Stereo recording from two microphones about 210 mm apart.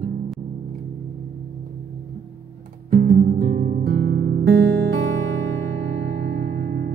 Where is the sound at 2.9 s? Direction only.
45° right (ahead or behind).